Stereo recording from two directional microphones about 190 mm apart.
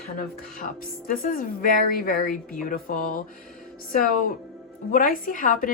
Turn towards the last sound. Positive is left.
turn(degrees=45)  # may be behind; listen again after turning